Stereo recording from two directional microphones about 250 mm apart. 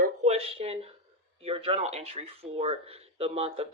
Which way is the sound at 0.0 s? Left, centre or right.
Right.